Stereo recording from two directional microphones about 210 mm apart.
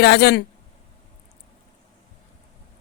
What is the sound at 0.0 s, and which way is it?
Speech, 50° left (ahead or behind).